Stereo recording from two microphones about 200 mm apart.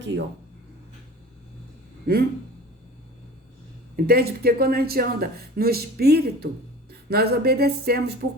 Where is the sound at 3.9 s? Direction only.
50° right (ahead or behind).